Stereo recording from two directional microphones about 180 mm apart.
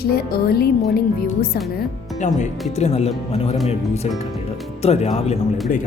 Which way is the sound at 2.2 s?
40° left (ahead or behind).